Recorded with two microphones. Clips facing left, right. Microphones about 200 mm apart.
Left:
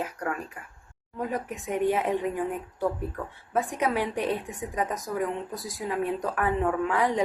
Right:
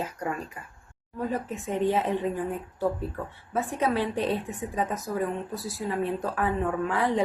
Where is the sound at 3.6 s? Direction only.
15° left (ahead or behind).